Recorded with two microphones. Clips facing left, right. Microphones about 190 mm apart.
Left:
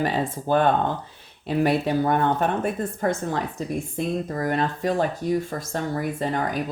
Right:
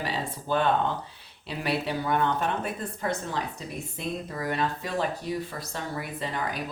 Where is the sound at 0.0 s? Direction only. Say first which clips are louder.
Left 8 dB; 50° left (ahead or behind).